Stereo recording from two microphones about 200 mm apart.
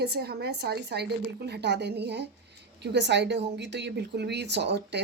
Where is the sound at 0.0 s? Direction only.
50° right (ahead or behind).